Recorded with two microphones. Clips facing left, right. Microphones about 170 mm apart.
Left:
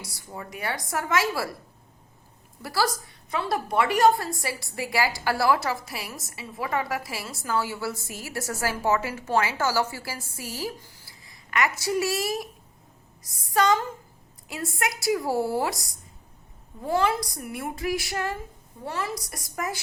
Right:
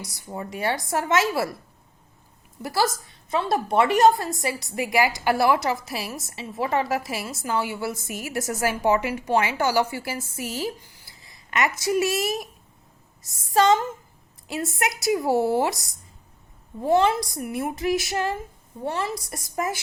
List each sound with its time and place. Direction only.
0.0 s a woman's voice: 20° right (ahead or behind)
2.6 s a woman's voice: 20° right (ahead or behind)